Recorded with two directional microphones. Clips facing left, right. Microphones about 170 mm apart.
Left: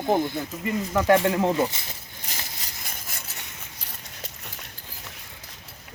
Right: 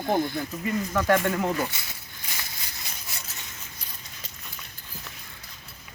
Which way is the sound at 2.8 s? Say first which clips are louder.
Left 3 dB; 55° left (ahead or behind).